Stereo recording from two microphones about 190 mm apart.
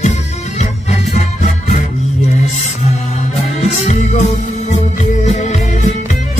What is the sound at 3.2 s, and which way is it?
Music, 35° left (ahead or behind).